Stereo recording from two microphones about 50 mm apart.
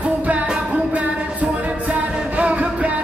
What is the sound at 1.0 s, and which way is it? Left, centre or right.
Music, right.